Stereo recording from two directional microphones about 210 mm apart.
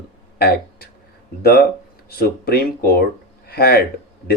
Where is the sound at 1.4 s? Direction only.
50° left (ahead or behind).